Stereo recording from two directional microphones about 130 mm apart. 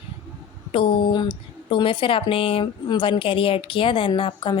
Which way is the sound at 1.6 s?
40° left (ahead or behind).